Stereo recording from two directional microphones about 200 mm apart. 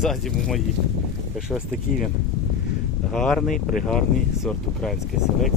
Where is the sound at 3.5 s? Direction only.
45° left (ahead or behind).